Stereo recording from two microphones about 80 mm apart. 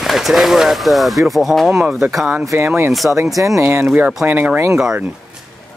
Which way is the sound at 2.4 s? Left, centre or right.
Right.